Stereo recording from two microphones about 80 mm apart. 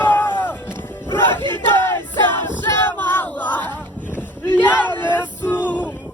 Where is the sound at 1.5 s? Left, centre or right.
Left.